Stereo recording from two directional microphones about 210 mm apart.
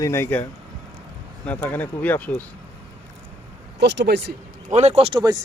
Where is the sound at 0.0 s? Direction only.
10° left (ahead or behind).